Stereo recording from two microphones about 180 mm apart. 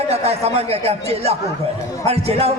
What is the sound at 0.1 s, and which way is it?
A man's voice, 35° right (ahead or behind).